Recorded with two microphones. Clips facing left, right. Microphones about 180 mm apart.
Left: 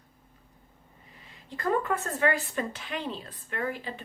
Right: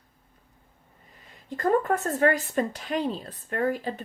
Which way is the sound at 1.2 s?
45° right (ahead or behind).